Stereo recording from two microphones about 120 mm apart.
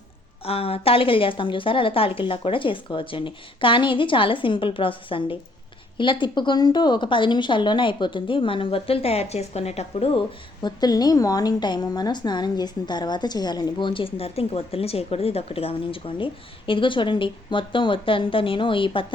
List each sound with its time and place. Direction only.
0.4 s a woman's voice: 55° left (ahead or behind)
10.6 s a woman's voice: 35° left (ahead or behind)